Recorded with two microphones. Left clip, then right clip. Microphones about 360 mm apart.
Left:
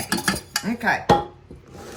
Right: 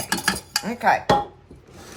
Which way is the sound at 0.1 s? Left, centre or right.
Centre.